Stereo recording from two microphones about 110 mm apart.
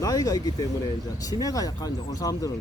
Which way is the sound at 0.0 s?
35° left (ahead or behind).